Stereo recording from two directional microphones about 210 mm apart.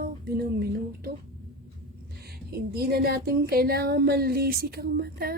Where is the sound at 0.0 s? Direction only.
45° right (ahead or behind).